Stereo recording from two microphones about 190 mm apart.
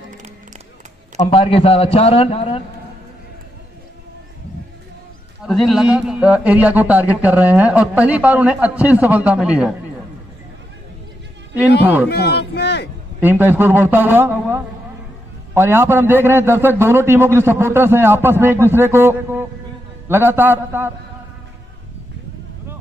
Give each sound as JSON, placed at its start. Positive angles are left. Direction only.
{"t": 1.1, "sound": "a man's voice", "side_deg": 30}
{"t": 5.4, "sound": "speech", "side_deg": 0}
{"t": 11.8, "sound": "speech", "side_deg": -10}
{"t": 12.1, "sound": "speech", "side_deg": 60}
{"t": 13.2, "sound": "speech", "side_deg": -10}